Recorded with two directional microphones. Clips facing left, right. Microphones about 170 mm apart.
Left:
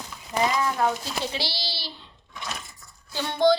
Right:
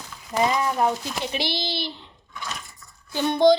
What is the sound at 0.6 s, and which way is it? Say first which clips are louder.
A woman's voice: right 2 dB; 15° right (ahead or behind).